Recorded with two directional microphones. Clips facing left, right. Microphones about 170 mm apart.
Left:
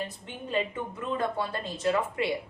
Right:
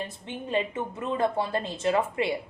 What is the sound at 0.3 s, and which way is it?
Speech, 25° right (ahead or behind).